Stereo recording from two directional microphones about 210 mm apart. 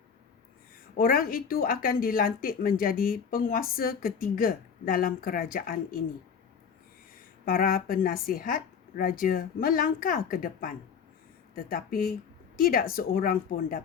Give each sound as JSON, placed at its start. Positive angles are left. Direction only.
{"t": 0.9, "sound": "speech", "side_deg": 45}
{"t": 7.4, "sound": "speech", "side_deg": 45}